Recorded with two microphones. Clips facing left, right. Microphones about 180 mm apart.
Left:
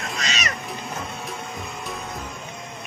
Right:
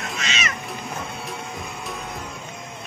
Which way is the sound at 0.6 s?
Centre (ahead or behind).